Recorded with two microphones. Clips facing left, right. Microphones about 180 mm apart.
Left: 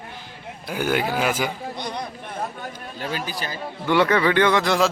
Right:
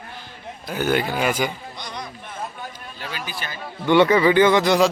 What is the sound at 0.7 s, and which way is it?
Speech, 10° left (ahead or behind).